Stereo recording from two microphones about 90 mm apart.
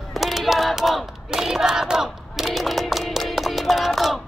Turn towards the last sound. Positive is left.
turn(degrees=0)  # may be behind; listen again after turning